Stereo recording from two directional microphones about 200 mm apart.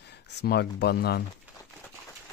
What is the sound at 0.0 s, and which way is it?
Speech, 55° left (ahead or behind).